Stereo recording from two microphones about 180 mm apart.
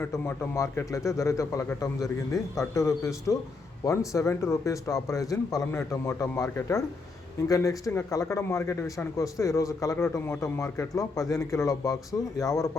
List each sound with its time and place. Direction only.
0.0 s a man's voice: 15° left (ahead or behind)